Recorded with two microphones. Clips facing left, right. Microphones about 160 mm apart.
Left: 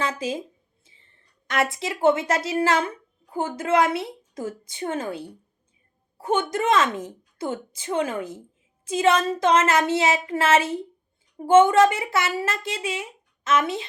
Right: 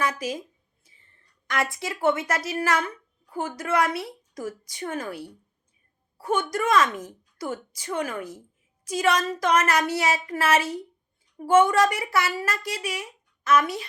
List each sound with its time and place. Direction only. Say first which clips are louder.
0.0 s speech: left 1 dB; 25° left (ahead or behind)
1.5 s a woman's voice: left 3 dB; 25° left (ahead or behind)